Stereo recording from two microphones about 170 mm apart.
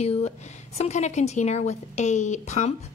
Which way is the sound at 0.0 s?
40° left (ahead or behind).